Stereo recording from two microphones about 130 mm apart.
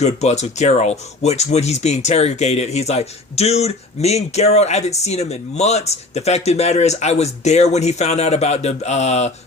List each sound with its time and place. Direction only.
0.0 s speech: 60° left (ahead or behind)